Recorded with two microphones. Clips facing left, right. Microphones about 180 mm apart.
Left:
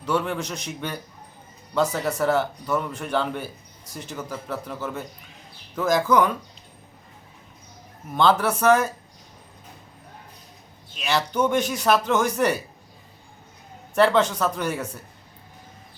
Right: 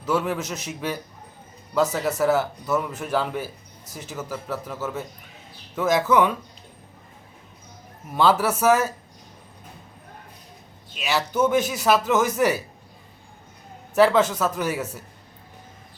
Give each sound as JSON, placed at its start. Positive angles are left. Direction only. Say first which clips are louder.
{"t": 0.0, "sound": "speech", "louder": "right 1 dB", "side_deg": -5}
{"t": 8.1, "sound": "speech", "louder": "even", "side_deg": -5}
{"t": 10.9, "sound": "speech", "louder": "even", "side_deg": -5}
{"t": 13.9, "sound": "speech", "louder": "right 1 dB", "side_deg": -5}